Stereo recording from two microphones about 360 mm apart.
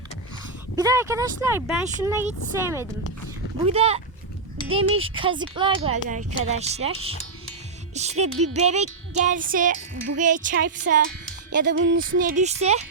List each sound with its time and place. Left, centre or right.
0.8 s speech: centre
3.7 s speech: centre
7.9 s music: centre